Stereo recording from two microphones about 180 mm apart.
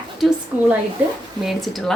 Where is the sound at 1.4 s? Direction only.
Centre (ahead or behind).